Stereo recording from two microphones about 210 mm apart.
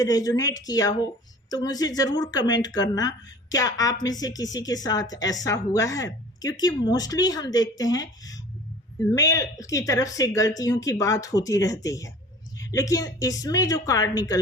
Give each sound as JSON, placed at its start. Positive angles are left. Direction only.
{"t": 0.0, "sound": "a woman's voice", "side_deg": 15}